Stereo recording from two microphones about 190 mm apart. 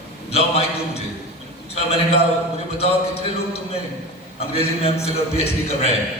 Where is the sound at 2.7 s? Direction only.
30° left (ahead or behind).